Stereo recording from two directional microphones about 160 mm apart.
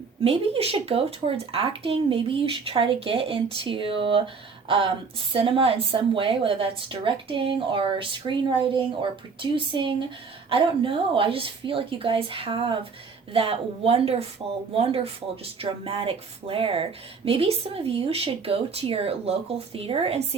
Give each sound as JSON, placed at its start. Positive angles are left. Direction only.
{"t": 0.3, "sound": "a woman's voice", "side_deg": -35}
{"t": 5.3, "sound": "a woman's voice", "side_deg": -35}